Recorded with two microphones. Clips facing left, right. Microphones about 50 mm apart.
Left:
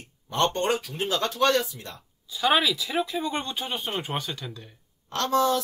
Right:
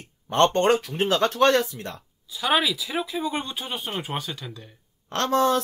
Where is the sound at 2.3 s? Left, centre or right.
Centre.